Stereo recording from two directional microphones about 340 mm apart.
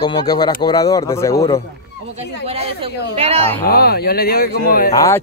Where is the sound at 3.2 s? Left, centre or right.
Centre.